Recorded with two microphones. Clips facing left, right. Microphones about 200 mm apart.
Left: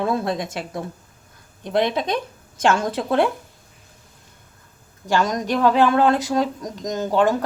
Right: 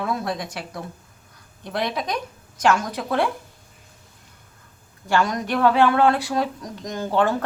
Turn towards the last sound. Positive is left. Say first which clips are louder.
# left 3 dB
turn(degrees=15)  # may be behind; listen again after turning